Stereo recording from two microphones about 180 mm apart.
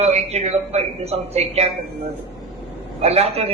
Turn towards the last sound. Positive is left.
turn(degrees=-35)  # may be behind; listen again after turning